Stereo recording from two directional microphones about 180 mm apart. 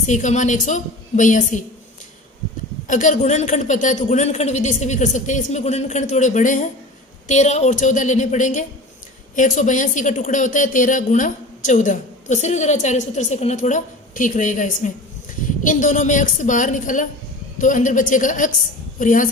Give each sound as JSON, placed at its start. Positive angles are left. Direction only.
{"t": 0.0, "sound": "speech", "side_deg": 40}
{"t": 2.8, "sound": "a woman's voice", "side_deg": 45}